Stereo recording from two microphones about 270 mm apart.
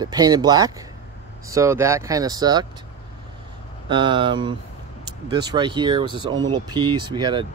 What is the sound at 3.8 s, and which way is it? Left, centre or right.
Speech, centre.